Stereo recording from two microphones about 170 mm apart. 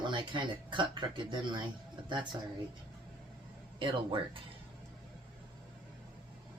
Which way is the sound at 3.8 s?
30° right (ahead or behind).